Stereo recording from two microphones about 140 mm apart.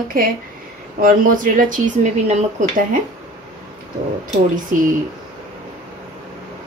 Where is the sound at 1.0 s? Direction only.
75° right (ahead or behind).